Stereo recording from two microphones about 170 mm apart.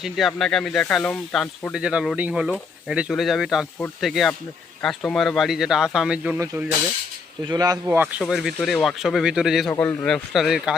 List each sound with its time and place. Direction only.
0.0 s speech: centre (ahead or behind)
6.4 s speech: 20° right (ahead or behind)
7.9 s speech: 10° right (ahead or behind)